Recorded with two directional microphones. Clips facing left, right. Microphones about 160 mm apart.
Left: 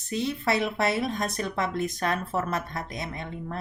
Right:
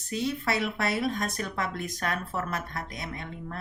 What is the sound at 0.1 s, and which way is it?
A woman's voice, 20° left (ahead or behind).